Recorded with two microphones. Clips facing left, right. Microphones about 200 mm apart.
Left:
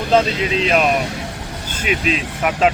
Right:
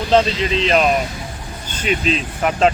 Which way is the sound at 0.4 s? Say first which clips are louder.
Even; 5° left (ahead or behind).